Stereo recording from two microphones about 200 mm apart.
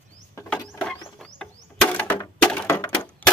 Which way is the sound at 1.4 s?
10° left (ahead or behind).